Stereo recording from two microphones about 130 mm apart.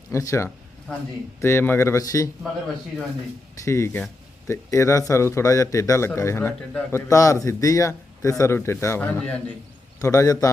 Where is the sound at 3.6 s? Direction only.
20° left (ahead or behind).